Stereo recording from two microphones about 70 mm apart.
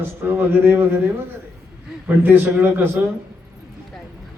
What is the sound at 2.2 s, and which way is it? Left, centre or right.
Speech, right.